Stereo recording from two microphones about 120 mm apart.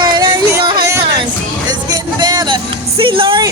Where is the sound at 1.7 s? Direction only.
35° right (ahead or behind).